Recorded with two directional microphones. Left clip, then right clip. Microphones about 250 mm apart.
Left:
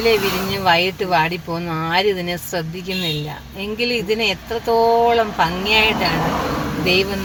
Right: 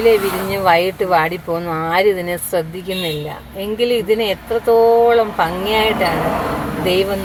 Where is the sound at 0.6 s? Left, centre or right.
Left.